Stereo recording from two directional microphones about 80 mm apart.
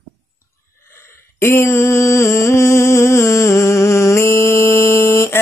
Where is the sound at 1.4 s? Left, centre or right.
Left.